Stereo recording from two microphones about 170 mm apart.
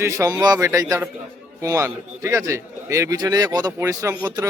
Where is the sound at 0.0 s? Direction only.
20° right (ahead or behind).